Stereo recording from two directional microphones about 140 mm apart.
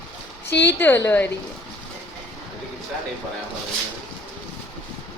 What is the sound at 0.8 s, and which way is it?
Speech, 15° left (ahead or behind).